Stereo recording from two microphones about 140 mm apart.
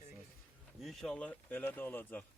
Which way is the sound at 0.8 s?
Centre (ahead or behind).